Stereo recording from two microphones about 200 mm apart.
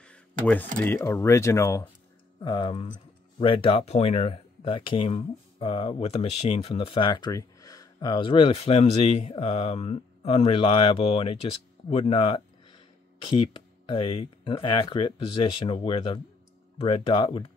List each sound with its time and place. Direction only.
0.8 s speech: 15° left (ahead or behind)